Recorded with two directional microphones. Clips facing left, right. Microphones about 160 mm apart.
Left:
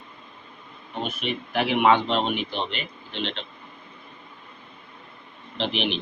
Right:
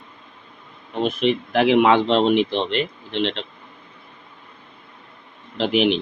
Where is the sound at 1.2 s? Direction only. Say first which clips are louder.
Right 8 dB; 90° right.